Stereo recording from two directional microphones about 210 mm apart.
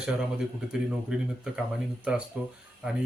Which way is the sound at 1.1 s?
5° right (ahead or behind).